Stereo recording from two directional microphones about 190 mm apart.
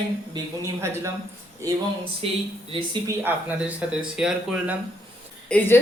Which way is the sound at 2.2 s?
30° right (ahead or behind).